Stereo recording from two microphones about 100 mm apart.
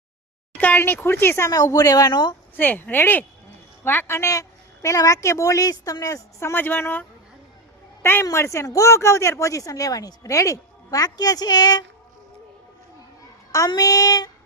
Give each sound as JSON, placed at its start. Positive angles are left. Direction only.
{"t": 0.6, "sound": "speech", "side_deg": 20}
{"t": 1.5, "sound": "speech", "side_deg": 40}
{"t": 2.6, "sound": "speech", "side_deg": 20}
{"t": 8.0, "sound": "speech", "side_deg": 25}
{"t": 13.7, "sound": "speech", "side_deg": 40}